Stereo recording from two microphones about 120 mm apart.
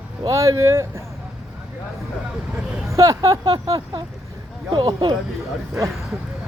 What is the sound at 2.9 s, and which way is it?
Speech, 30° right (ahead or behind).